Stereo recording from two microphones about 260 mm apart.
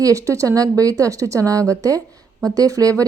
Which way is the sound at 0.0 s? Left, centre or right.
Centre.